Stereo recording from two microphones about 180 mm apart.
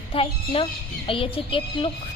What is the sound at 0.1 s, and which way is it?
A woman's voice, 30° left (ahead or behind).